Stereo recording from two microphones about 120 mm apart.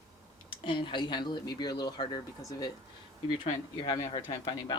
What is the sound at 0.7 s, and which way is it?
Speech, 45° left (ahead or behind).